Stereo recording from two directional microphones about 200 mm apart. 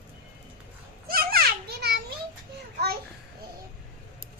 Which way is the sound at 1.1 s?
50° right (ahead or behind).